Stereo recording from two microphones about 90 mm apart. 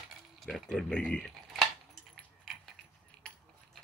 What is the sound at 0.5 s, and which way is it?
Speech, 5° left (ahead or behind).